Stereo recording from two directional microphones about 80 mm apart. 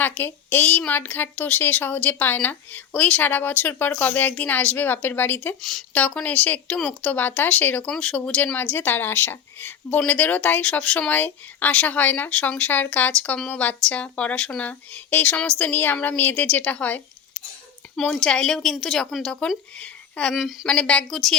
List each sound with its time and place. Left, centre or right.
0.0 s a woman's voice: left
8.5 s a woman's voice: left
18.0 s speech: centre
19.7 s a sound: centre
20.3 s a woman's voice: centre
20.7 s speech: centre